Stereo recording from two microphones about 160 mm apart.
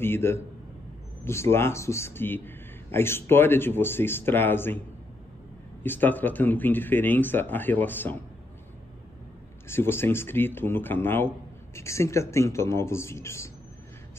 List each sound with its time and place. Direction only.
0.0 s a man's voice: 15° left (ahead or behind)
5.9 s a man's voice: 10° left (ahead or behind)
9.7 s a man's voice: 15° left (ahead or behind)